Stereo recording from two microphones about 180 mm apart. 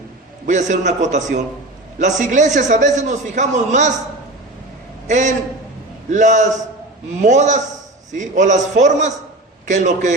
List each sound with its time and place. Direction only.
0.4 s a man's voice: 45° right (ahead or behind)
5.0 s a man's voice: 45° right (ahead or behind)